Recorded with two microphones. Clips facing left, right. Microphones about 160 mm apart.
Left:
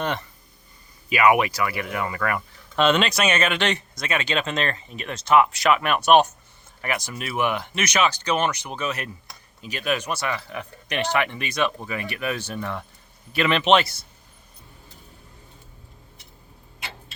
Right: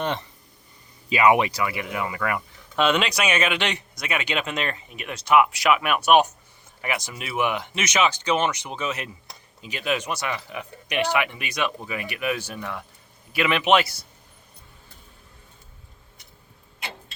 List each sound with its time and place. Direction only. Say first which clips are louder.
0.0 s speech: even; 20° right (ahead or behind)